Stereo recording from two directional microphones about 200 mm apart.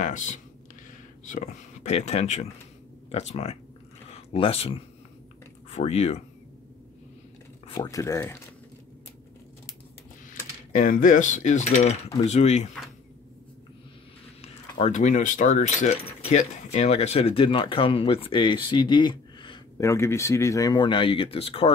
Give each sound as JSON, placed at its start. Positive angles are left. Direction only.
{"t": 0.0, "sound": "cutlery", "side_deg": 40}
{"t": 1.2, "sound": "speech", "side_deg": 40}
{"t": 3.1, "sound": "cutlery", "side_deg": 35}
{"t": 4.1, "sound": "speech", "side_deg": 30}
{"t": 5.7, "sound": "cutlery", "side_deg": 30}
{"t": 7.7, "sound": "speech", "side_deg": 15}
{"t": 10.7, "sound": "cutlery", "side_deg": 40}
{"t": 14.4, "sound": "speech", "side_deg": 35}